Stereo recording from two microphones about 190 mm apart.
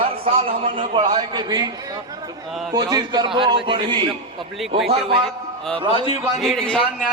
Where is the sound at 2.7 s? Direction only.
20° right (ahead or behind).